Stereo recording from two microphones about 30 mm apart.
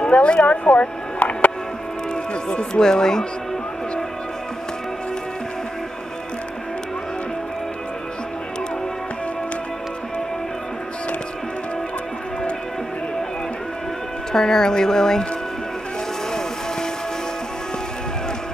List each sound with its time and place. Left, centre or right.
0.0 s speech: left
1.2 s music: left
2.7 s speech: left
14.3 s speech: centre
16.3 s vehicle: left